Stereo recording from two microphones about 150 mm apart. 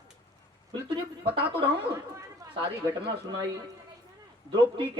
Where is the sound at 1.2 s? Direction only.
35° right (ahead or behind).